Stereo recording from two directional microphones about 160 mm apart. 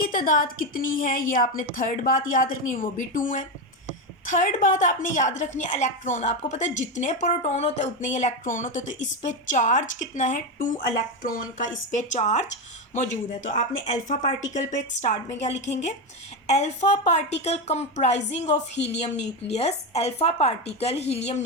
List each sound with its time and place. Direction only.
0.1 s a woman's voice: 60° left (ahead or behind); by 21.4 s 40° left (ahead or behind)